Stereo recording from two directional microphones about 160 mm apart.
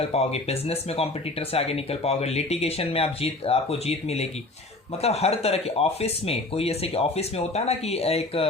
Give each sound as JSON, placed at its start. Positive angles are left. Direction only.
{"t": 0.1, "sound": "speech", "side_deg": 40}